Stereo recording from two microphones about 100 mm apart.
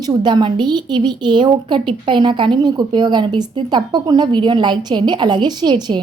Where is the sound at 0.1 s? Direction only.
45° right (ahead or behind).